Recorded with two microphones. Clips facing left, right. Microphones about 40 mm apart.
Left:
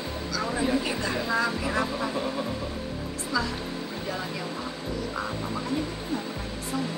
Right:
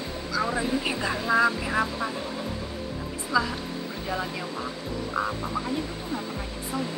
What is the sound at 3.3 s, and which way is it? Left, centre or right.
Speech, centre.